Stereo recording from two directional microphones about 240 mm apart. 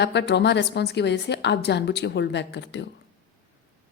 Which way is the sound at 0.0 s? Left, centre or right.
Left.